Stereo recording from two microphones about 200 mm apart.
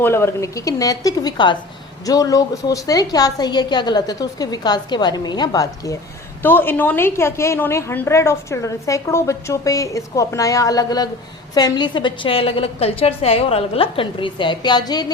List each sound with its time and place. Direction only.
0.0 s a woman's voice: 10° left (ahead or behind)